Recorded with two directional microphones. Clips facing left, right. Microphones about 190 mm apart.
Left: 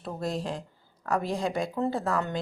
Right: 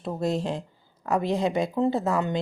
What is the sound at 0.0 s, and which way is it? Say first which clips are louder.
Speech: right 5 dB; 25° right (ahead or behind).